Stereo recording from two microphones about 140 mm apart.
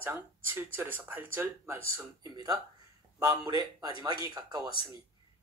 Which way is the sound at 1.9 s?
25° right (ahead or behind).